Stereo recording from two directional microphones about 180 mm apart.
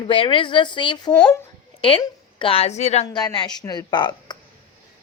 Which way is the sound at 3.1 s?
25° left (ahead or behind).